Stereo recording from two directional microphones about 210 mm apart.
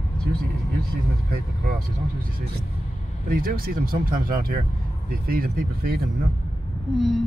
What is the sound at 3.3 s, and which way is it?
Speech, 45° right (ahead or behind).